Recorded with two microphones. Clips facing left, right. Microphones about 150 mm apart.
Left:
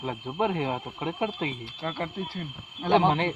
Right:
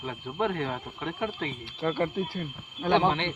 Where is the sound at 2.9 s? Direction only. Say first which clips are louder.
Left 2 dB; 35° left (ahead or behind).